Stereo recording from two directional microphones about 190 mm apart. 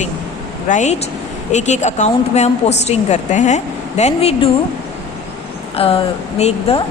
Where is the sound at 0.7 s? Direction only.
40° left (ahead or behind).